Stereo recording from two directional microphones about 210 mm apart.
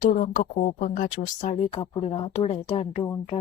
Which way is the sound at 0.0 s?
40° left (ahead or behind).